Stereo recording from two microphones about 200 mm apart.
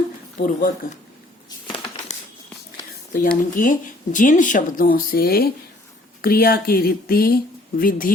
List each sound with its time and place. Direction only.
0.3 s speech: 40° left (ahead or behind)
1.5 s a sound: 25° left (ahead or behind)
3.1 s speech: 40° left (ahead or behind)